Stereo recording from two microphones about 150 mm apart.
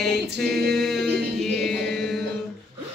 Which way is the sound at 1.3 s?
Centre (ahead or behind).